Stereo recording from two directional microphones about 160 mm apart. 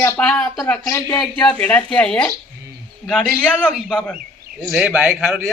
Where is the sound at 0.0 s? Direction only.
5° left (ahead or behind).